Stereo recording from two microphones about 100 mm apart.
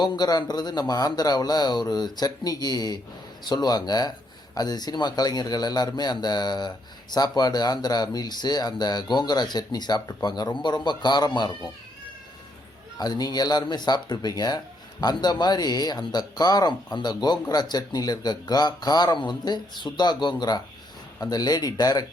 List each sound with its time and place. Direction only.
0.0 s speech: 45° left (ahead or behind)
13.0 s speech: 40° left (ahead or behind)